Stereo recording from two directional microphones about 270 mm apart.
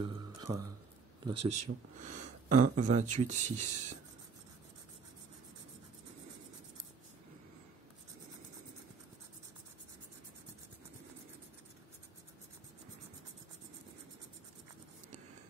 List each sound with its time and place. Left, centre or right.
0.0 s music: centre
1.2 s speech: right